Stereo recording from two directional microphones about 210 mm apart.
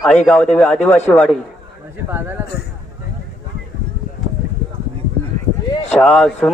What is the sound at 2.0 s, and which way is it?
Speech, 10° right (ahead or behind).